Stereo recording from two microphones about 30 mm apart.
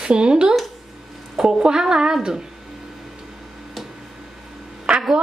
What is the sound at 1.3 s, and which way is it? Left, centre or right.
Speech, centre.